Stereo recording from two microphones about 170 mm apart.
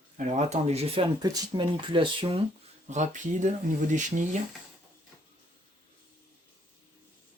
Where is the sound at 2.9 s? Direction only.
45° right (ahead or behind).